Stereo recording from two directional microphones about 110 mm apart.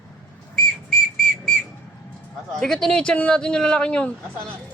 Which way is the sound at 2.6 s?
5° left (ahead or behind).